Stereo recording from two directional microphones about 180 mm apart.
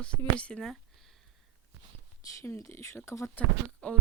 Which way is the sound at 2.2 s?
15° left (ahead or behind).